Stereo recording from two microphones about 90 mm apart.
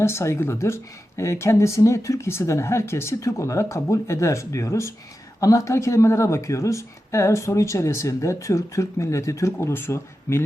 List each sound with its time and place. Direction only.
0.0 s speech: 30° left (ahead or behind)